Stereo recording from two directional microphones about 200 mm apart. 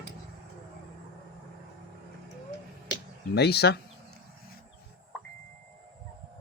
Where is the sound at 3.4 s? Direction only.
55° left (ahead or behind).